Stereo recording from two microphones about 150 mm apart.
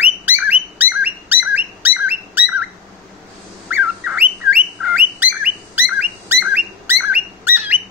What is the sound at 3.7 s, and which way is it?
Bird, 10° right (ahead or behind).